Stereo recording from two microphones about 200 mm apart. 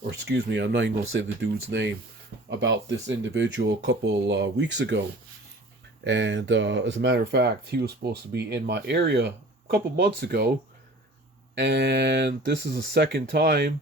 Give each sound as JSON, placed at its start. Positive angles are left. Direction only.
{"t": 0.3, "sound": "speech", "side_deg": -60}
{"t": 6.1, "sound": "speech", "side_deg": -65}
{"t": 11.5, "sound": "speech", "side_deg": -60}